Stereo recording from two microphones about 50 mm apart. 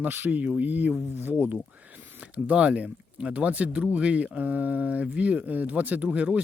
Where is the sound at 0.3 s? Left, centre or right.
Right.